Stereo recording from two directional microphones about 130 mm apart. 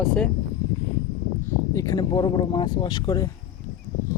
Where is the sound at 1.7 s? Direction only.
25° left (ahead or behind).